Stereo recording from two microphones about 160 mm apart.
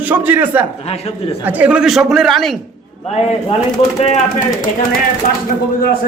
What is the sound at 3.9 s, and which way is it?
Speech, 45° left (ahead or behind).